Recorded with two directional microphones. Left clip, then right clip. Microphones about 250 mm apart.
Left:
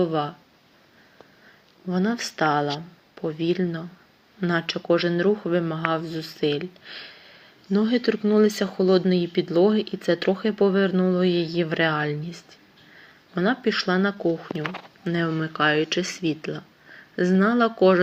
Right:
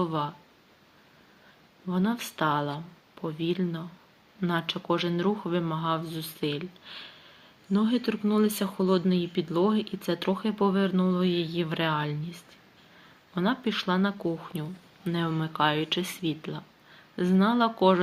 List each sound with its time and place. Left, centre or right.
0.0 s speech: centre
1.9 s speech: centre
13.3 s speech: centre